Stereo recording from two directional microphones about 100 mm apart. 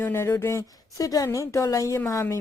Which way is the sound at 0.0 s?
25° left (ahead or behind).